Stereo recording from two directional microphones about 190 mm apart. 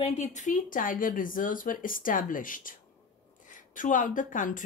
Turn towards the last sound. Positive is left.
turn(degrees=45)  # may be behind; listen again after turning